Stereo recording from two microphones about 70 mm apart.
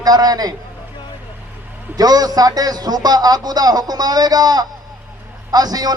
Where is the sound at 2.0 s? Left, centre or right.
Right.